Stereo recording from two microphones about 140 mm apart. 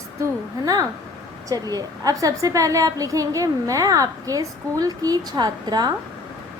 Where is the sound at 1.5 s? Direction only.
25° right (ahead or behind).